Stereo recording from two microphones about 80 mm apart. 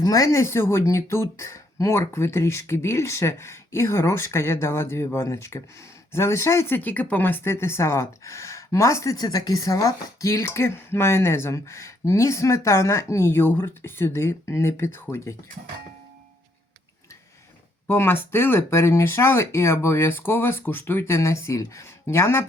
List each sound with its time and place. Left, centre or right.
0.0 s speech: left
9.1 s speech: left
17.8 s speech: left